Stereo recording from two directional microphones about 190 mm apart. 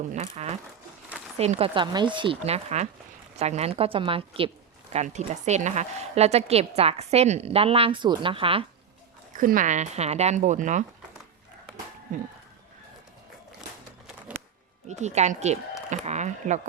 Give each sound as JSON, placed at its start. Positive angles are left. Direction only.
{"t": 0.1, "sound": "speech", "side_deg": -35}
{"t": 9.3, "sound": "speech", "side_deg": -45}
{"t": 14.8, "sound": "speech", "side_deg": -35}